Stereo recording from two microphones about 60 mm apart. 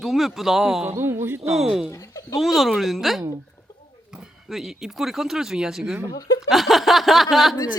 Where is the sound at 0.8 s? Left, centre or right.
Right.